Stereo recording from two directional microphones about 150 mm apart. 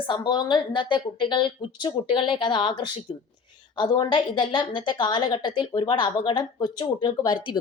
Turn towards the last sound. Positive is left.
turn(degrees=30)  # may be behind; listen again after turning